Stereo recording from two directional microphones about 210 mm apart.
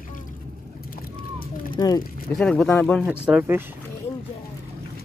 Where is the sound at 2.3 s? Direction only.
5° left (ahead or behind).